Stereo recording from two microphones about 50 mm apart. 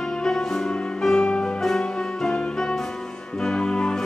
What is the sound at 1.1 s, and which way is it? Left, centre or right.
Music, centre.